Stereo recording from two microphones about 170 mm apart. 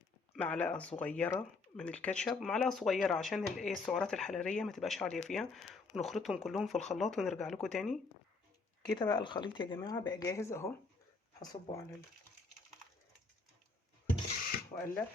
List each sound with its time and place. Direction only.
0.3 s speech: 5° left (ahead or behind)
9.0 s speech: 25° left (ahead or behind)